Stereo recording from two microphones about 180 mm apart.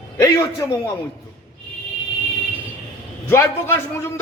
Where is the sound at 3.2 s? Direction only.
15° left (ahead or behind).